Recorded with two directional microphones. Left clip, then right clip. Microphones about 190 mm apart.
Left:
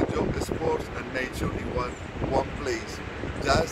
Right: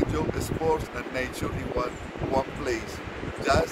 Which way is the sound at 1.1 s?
50° right (ahead or behind).